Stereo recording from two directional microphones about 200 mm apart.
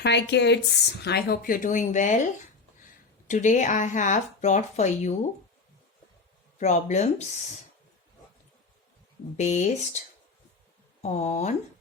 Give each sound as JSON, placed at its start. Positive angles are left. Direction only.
{"t": 0.0, "sound": "speech", "side_deg": 60}
{"t": 3.2, "sound": "speech", "side_deg": 35}
{"t": 6.6, "sound": "speech", "side_deg": 35}
{"t": 9.4, "sound": "speech", "side_deg": 40}
{"t": 11.0, "sound": "speech", "side_deg": 35}